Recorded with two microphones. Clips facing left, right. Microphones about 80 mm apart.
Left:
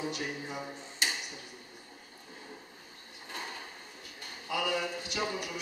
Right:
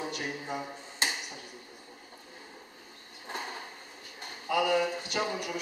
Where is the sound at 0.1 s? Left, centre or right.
Right.